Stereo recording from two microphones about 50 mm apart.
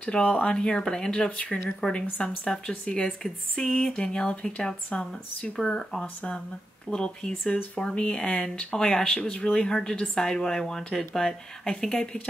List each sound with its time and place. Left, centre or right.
0.0 s speech: centre